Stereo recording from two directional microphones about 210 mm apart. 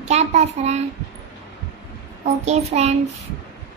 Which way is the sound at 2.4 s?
30° right (ahead or behind).